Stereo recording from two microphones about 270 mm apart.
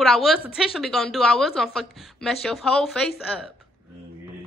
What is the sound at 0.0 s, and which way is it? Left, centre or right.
Speech, centre.